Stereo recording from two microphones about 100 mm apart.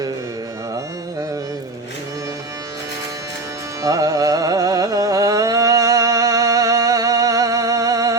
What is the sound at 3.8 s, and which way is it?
Carnatic music, 35° right (ahead or behind).